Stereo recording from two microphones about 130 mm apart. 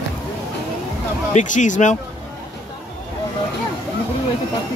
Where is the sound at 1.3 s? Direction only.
75° left (ahead or behind).